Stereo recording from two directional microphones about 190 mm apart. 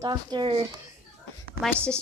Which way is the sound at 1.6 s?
5° left (ahead or behind).